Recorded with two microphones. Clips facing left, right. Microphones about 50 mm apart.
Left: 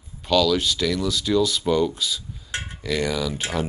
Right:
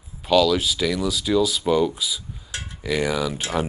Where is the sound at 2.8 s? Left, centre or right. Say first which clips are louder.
Right 2 dB; centre.